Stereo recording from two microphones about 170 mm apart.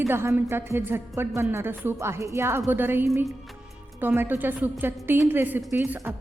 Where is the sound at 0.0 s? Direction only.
15° right (ahead or behind).